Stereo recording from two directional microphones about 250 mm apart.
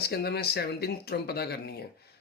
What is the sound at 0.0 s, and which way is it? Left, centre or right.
Speech, left.